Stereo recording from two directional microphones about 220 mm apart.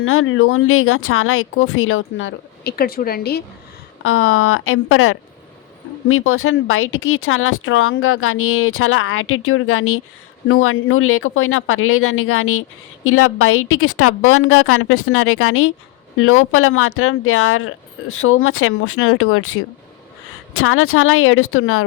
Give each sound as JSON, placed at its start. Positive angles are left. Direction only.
{"t": 0.0, "sound": "speech", "side_deg": 70}
{"t": 4.0, "sound": "speech", "side_deg": 70}